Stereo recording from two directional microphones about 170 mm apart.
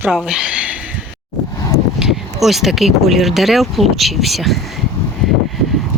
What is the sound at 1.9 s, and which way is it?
Speech, centre (ahead or behind).